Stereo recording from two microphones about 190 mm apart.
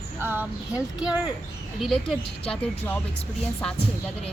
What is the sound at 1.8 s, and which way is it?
Speech, centre (ahead or behind).